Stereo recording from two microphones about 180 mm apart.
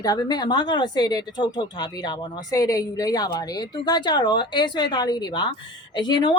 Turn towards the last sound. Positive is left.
turn(degrees=25)  # may be behind; listen again after turning